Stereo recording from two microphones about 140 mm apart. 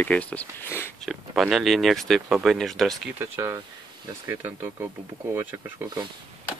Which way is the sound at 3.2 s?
20° right (ahead or behind).